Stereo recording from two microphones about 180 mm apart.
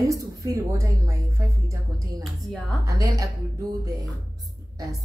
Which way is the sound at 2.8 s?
20° right (ahead or behind).